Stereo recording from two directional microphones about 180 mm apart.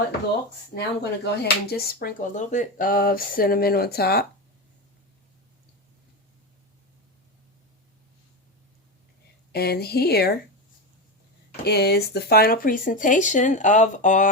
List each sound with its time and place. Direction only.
0.8 s speech: 65° left (ahead or behind)
9.5 s speech: 60° left (ahead or behind)
11.6 s speech: 65° left (ahead or behind); by 14.3 s 45° left (ahead or behind)